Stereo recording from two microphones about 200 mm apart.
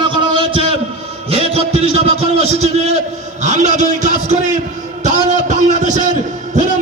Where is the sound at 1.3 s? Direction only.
30° right (ahead or behind).